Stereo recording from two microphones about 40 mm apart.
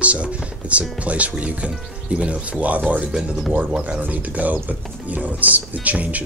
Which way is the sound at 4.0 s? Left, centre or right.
Right.